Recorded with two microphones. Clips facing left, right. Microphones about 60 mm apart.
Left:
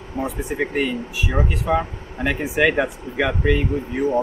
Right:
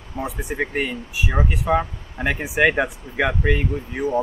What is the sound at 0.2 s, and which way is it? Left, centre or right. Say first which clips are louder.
Speech: left 2 dB; right.